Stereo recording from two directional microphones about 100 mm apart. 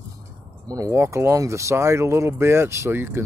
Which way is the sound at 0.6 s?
35° right (ahead or behind).